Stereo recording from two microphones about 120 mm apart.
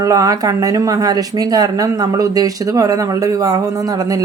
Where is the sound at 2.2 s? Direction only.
30° right (ahead or behind).